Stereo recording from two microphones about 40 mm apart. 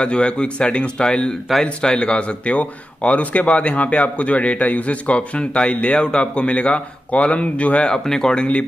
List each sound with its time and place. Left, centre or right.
0.0 s speech: left
2.0 s speech: left
7.9 s speech: centre